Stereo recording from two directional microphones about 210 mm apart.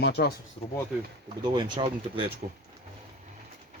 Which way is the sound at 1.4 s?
20° right (ahead or behind).